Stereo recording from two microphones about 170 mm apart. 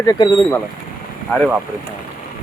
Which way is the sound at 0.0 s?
20° left (ahead or behind).